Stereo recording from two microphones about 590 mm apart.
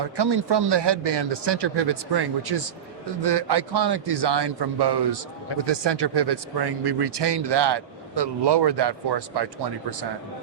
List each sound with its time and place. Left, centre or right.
0.0 s speech: right